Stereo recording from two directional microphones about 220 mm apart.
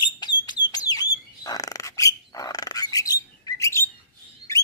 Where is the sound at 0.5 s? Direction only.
20° left (ahead or behind).